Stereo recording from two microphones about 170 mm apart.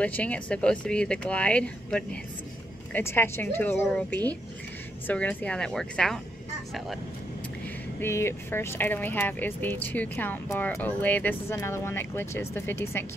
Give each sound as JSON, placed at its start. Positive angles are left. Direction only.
{"t": 0.0, "sound": "speech", "side_deg": 10}
{"t": 8.0, "sound": "speech", "side_deg": 15}